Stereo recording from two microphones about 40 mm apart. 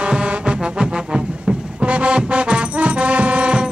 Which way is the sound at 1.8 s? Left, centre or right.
Right.